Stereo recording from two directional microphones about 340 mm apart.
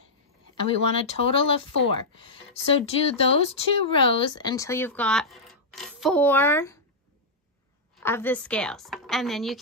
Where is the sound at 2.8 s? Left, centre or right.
Centre.